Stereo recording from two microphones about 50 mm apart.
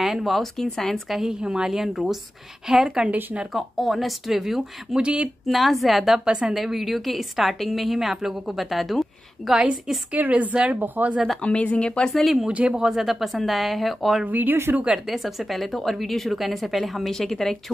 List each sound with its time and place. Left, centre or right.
0.0 s a woman's voice: centre
1.2 s speech: centre
1.8 s speech: centre
3.5 s a woman's voice: centre
4.9 s speech: right
5.5 s a woman's voice: centre
10.1 s a woman's voice: right
10.8 s a woman's voice: right
11.4 s speech: left
12.1 s a woman's voice: centre
12.4 s speech: centre
12.9 s a woman's voice: centre
14.2 s a woman's voice: right
15.0 s a woman's voice: centre